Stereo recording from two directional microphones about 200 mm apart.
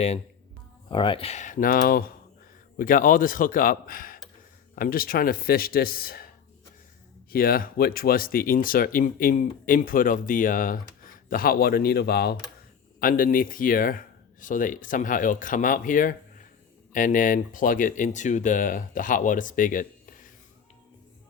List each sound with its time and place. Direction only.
0.9 s speech: 25° left (ahead or behind); by 20.3 s 40° left (ahead or behind)